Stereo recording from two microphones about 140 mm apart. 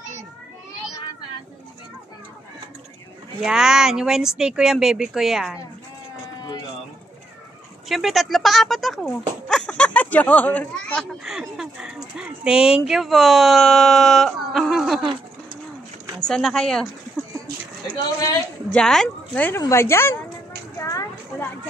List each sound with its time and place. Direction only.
3.4 s speech: 5° right (ahead or behind)
7.9 s speech: centre (ahead or behind)
11.2 s speech: 5° right (ahead or behind)
16.3 s speech: 5° left (ahead or behind)
18.7 s speech: 5° left (ahead or behind)
20.8 s a sound: 25° left (ahead or behind)